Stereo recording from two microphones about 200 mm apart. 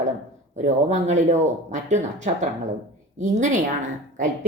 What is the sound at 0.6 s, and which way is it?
A woman's voice, 35° right (ahead or behind).